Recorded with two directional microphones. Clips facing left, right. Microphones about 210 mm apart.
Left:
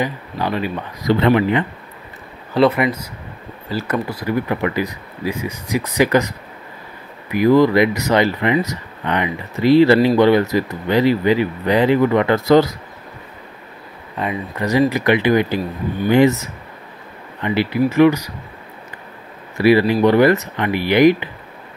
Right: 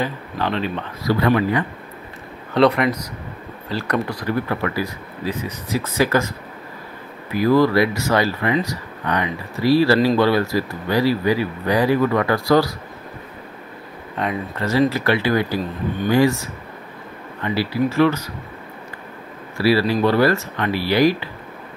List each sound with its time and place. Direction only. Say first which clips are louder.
0.0 s speech: left 2 dB; 10° left (ahead or behind)
1.0 s speech: left 3 dB; 20° left (ahead or behind)
2.5 s speech: left 1 dB; 5° left (ahead or behind); by 12.7 s 20° left (ahead or behind)
14.2 s speech: even; centre (ahead or behind)
14.6 s speech: left 2 dB; 15° left (ahead or behind)
19.5 s speech: left 4 dB; 20° left (ahead or behind)